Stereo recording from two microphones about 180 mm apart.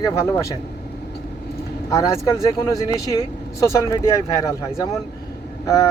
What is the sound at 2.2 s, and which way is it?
Speech, 15° left (ahead or behind).